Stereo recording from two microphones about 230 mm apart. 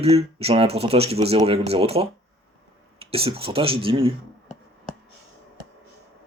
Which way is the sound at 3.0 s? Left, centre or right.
Right.